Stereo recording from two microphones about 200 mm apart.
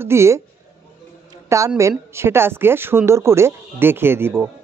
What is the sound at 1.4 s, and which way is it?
A woman's voice, 15° right (ahead or behind).